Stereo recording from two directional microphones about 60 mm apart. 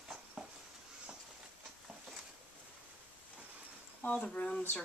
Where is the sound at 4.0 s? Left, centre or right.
Left.